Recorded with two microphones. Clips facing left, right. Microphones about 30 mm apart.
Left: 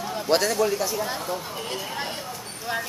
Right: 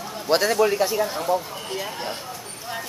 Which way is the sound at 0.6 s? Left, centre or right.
Right.